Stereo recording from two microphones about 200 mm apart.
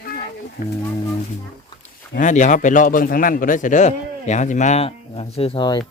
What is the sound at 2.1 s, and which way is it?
A man's voice, 40° left (ahead or behind).